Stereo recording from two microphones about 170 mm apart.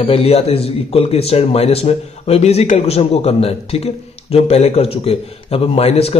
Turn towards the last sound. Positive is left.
turn(degrees=35)  # may be behind; listen again after turning